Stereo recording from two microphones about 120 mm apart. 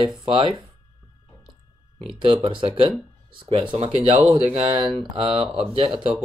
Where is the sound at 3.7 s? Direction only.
60° right (ahead or behind).